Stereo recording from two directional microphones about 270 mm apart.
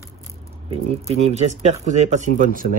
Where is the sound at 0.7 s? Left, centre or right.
Right.